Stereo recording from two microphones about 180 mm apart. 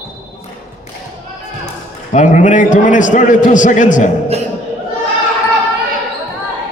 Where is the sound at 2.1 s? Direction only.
45° left (ahead or behind).